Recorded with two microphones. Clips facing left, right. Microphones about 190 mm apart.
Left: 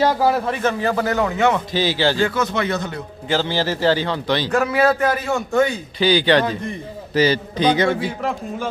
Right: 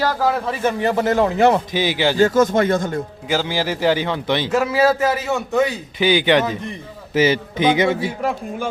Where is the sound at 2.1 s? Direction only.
45° right (ahead or behind).